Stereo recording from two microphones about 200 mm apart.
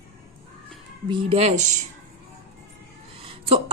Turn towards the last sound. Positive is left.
turn(degrees=-30)  # may be behind; listen again after turning